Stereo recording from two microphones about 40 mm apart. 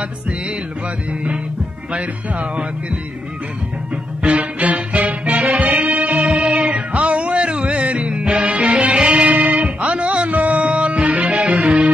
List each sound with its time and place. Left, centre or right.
4.2 s music: right
9.3 s music: right